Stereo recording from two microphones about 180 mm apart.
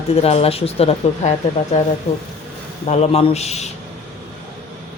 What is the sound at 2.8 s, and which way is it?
Speech, 35° left (ahead or behind).